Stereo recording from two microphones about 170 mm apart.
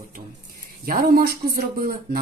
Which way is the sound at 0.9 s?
55° right (ahead or behind).